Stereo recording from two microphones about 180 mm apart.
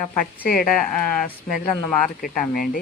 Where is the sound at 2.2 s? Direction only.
50° left (ahead or behind).